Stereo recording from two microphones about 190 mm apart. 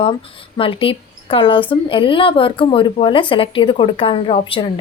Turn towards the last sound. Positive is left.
turn(degrees=30)  # may be behind; listen again after turning